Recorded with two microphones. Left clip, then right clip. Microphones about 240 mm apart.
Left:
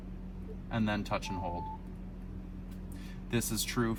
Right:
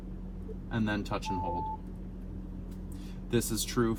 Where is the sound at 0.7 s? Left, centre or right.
Centre.